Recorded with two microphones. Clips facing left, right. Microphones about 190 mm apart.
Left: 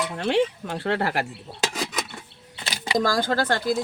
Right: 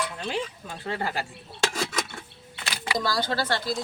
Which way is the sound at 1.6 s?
15° left (ahead or behind).